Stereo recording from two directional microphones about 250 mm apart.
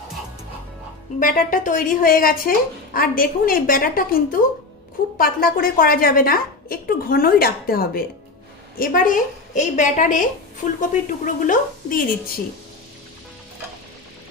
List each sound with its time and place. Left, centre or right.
1.2 s a woman's voice: left